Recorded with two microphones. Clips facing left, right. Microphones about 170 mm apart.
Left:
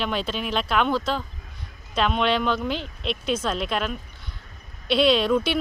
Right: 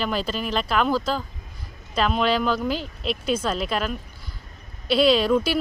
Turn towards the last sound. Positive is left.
turn(degrees=-5)  # may be behind; listen again after turning